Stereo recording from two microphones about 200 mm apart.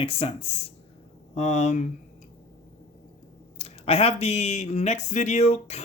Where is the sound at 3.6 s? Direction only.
30° left (ahead or behind).